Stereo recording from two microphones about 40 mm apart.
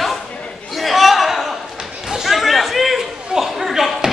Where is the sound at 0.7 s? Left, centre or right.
Centre.